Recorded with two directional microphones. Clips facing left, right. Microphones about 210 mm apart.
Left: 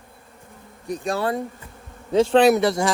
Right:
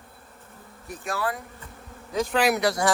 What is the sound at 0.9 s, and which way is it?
Speech, 25° left (ahead or behind).